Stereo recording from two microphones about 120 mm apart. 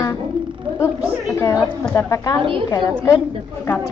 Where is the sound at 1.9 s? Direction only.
30° left (ahead or behind).